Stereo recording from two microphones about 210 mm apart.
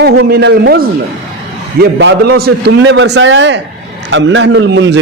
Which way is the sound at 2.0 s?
55° right (ahead or behind).